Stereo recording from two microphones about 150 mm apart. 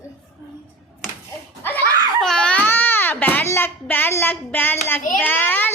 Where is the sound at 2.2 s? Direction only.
5° left (ahead or behind).